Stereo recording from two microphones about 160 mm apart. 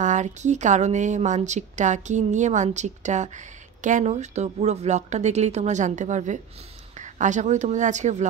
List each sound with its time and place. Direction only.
0.0 s speech: 50° right (ahead or behind)